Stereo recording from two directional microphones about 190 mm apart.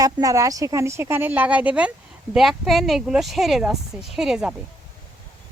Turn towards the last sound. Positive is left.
turn(degrees=-5)  # may be behind; listen again after turning